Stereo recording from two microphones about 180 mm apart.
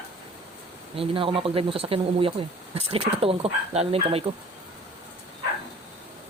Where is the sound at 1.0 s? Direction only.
30° right (ahead or behind).